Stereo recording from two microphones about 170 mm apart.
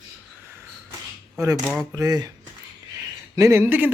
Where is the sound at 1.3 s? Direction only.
20° right (ahead or behind).